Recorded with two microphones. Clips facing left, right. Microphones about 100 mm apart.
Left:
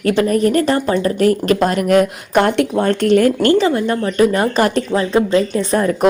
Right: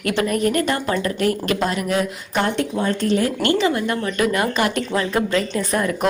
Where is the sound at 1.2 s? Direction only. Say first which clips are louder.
Left 6 dB; 40° left (ahead or behind); by 3.3 s 65° left (ahead or behind).